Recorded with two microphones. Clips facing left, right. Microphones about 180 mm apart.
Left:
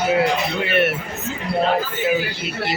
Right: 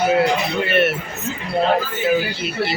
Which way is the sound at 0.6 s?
15° left (ahead or behind).